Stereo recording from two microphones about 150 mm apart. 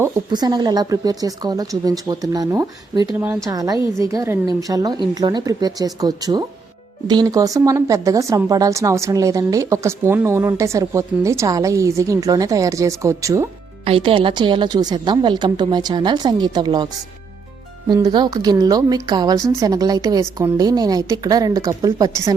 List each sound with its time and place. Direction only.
0.3 s speech: 30° right (ahead or behind)
13.8 s speech: 40° right (ahead or behind); by 22.4 s 25° right (ahead or behind)